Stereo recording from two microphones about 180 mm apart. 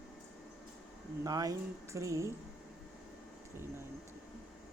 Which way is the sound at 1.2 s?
20° right (ahead or behind).